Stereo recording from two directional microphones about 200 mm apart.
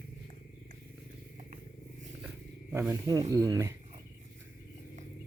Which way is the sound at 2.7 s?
15° right (ahead or behind).